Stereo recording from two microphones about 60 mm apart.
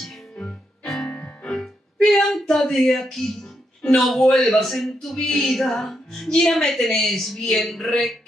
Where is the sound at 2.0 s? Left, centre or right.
Centre.